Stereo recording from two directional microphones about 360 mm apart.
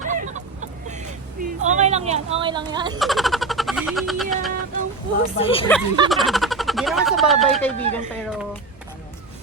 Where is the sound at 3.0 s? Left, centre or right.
Centre.